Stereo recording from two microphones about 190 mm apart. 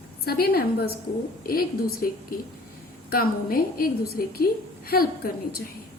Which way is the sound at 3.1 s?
50° left (ahead or behind).